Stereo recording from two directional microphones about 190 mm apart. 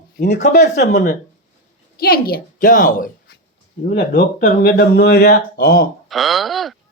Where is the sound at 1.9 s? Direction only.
50° left (ahead or behind).